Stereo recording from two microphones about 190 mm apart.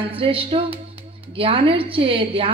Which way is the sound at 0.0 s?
30° right (ahead or behind).